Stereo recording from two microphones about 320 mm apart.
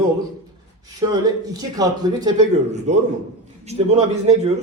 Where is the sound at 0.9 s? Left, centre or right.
Centre.